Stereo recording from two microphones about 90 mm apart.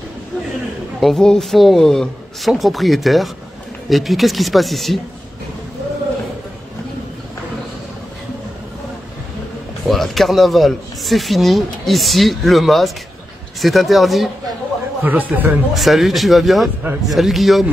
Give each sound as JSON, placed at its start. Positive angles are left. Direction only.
{"t": 1.0, "sound": "speech", "side_deg": 5}
{"t": 9.8, "sound": "speech", "side_deg": 0}
{"t": 15.0, "sound": "speech", "side_deg": -20}
{"t": 15.7, "sound": "speech", "side_deg": 0}